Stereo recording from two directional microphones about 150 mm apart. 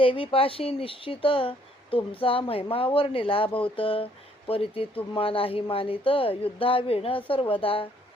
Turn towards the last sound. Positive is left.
turn(degrees=35)  # may be behind; listen again after turning